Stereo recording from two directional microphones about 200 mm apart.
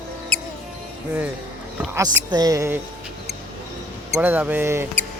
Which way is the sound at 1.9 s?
15° right (ahead or behind).